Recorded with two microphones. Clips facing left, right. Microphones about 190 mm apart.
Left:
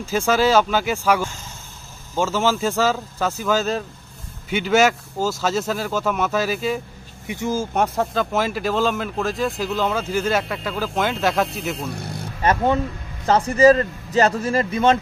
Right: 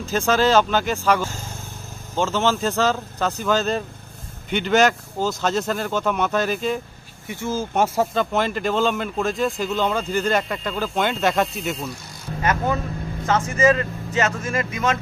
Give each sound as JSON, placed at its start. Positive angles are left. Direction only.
{"t": 0.0, "sound": "speech", "side_deg": 10}
{"t": 7.2, "sound": "speech", "side_deg": 15}
{"t": 7.7, "sound": "speech", "side_deg": -5}
{"t": 11.9, "sound": "speech", "side_deg": 60}
{"t": 12.4, "sound": "speech", "side_deg": 30}